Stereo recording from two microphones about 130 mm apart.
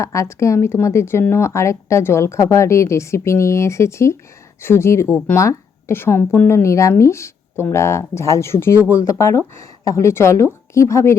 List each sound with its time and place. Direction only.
0.0 s speech: 25° left (ahead or behind)